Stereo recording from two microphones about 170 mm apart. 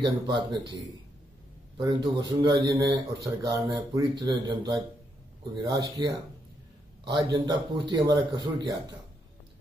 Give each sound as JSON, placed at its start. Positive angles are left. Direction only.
{"t": 0.0, "sound": "speech", "side_deg": -25}
{"t": 1.8, "sound": "speech", "side_deg": -25}
{"t": 7.3, "sound": "speech", "side_deg": -25}